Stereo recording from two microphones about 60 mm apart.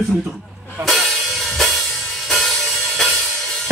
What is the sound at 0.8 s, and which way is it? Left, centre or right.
Music, centre.